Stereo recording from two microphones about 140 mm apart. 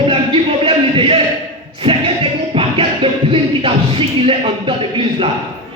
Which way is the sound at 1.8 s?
40° right (ahead or behind).